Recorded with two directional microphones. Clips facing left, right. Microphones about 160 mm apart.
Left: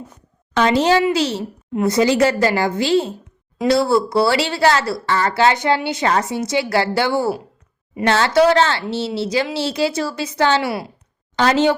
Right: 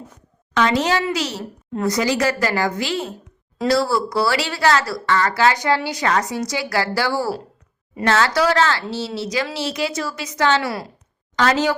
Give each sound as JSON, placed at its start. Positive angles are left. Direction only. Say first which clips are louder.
{"t": 0.5, "sound": "speech", "louder": "left 4 dB", "side_deg": 30}